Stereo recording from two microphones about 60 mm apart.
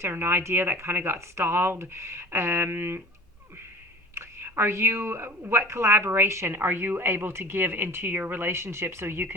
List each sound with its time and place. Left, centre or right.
0.0 s speech: right
4.1 s speech: right
6.5 s speech: right